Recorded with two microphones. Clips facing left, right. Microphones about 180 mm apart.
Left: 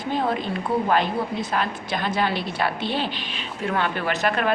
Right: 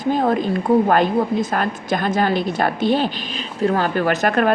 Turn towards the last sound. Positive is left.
turn(degrees=-45)  # may be behind; listen again after turning